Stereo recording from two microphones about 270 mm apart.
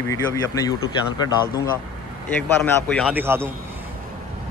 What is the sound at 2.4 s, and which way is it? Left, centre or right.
A man's voice, centre.